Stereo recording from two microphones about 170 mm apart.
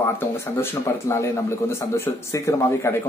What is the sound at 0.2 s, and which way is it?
A man's voice, 15° left (ahead or behind).